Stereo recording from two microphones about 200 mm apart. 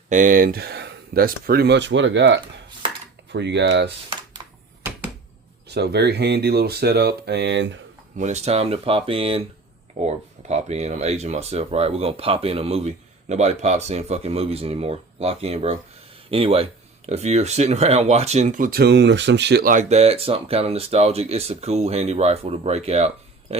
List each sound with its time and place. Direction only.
0.1 s speech: 40° right (ahead or behind); by 3.9 s 60° right (ahead or behind)
4.4 s a sound: 20° right (ahead or behind)
5.6 s speech: 55° right (ahead or behind)
8.2 s speech: 35° right (ahead or behind)